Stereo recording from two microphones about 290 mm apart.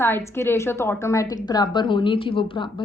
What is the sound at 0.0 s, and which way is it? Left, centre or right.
A woman's voice, centre.